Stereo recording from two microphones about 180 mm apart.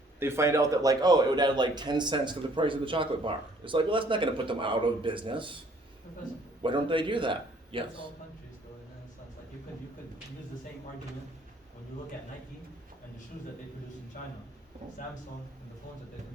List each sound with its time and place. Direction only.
0.2 s a man's voice: 15° right (ahead or behind)
6.6 s a man's voice: 25° right (ahead or behind)